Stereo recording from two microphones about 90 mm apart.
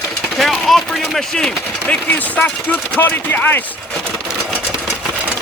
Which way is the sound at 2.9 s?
20° left (ahead or behind).